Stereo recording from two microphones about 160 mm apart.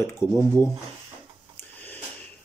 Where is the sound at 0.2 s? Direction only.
15° left (ahead or behind).